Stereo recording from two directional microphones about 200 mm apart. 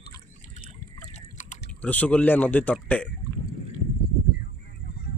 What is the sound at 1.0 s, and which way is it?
Drip, 35° left (ahead or behind).